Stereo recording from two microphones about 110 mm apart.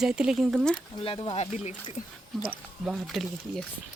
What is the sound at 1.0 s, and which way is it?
Speech, 55° left (ahead or behind).